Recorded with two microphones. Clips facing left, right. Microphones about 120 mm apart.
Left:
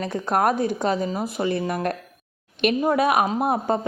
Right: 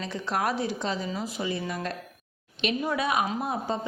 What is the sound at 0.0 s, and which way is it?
A woman's voice, 50° left (ahead or behind).